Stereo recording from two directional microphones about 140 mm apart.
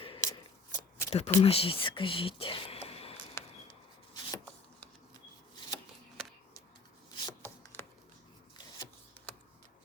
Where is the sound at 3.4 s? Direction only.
20° left (ahead or behind).